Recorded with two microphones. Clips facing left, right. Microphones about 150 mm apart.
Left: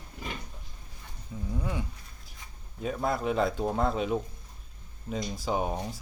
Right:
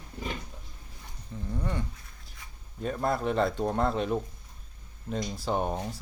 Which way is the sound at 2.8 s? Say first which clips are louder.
Right 1 dB; centre (ahead or behind).